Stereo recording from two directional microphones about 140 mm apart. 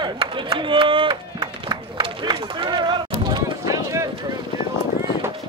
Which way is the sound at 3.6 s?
20° right (ahead or behind).